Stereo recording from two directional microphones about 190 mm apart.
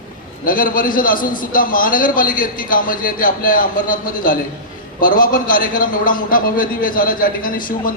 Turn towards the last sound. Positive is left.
turn(degrees=50)  # may be behind; listen again after turning